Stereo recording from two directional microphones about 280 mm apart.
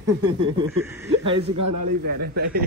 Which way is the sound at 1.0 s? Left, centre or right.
Centre.